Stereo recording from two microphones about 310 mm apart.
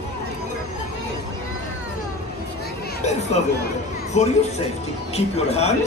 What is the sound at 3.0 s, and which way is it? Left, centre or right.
Speech, left.